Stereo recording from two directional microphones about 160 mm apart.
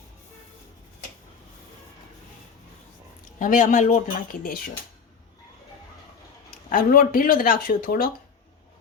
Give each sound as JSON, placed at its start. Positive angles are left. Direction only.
{"t": 3.3, "sound": "speech", "side_deg": 55}
{"t": 6.7, "sound": "speech", "side_deg": 60}